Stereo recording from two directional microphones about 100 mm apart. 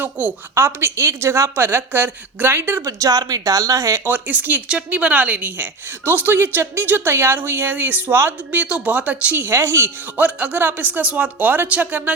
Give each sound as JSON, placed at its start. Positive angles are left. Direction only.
{"t": 0.0, "sound": "a woman's voice", "side_deg": -20}
{"t": 4.0, "sound": "a woman's voice", "side_deg": -20}
{"t": 10.2, "sound": "speech", "side_deg": -15}